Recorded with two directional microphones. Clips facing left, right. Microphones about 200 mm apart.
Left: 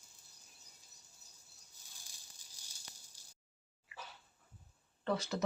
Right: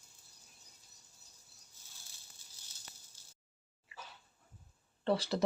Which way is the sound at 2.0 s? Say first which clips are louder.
Right 1 dB; 15° left (ahead or behind).